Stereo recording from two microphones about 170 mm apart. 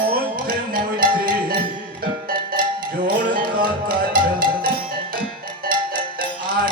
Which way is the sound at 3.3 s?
60° right (ahead or behind).